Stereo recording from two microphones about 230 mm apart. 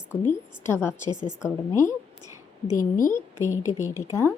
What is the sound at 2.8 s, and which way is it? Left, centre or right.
Speech, left.